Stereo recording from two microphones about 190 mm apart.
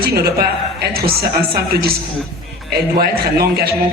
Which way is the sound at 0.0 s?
55° right (ahead or behind).